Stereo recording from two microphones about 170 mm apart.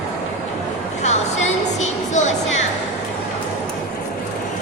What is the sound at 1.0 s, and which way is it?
Music, 40° left (ahead or behind).